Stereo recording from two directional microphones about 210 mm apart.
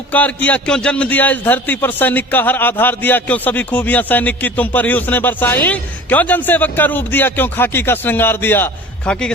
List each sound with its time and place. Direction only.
0.1 s a man's voice: 5° left (ahead or behind)